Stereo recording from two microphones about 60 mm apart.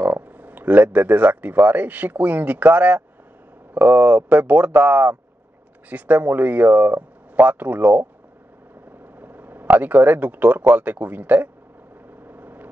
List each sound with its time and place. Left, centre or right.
0.0 s speech: right
9.2 s speech: right
12.3 s vehicle: right